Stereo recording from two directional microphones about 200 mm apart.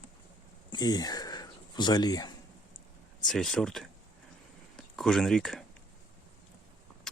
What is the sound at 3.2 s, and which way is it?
Speech, centre (ahead or behind).